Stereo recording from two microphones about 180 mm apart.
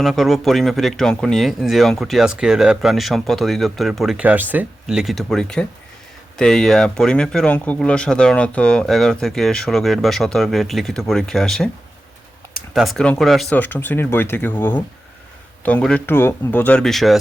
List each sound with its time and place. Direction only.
0.0 s speech: centre (ahead or behind)